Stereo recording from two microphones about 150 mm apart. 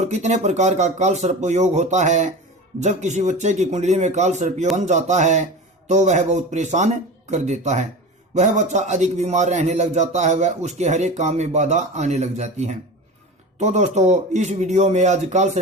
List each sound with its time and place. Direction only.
0.0 s a man's voice: 50° right (ahead or behind)